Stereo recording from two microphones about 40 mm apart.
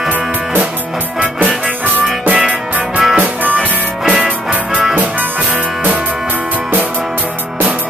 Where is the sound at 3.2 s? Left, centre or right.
Right.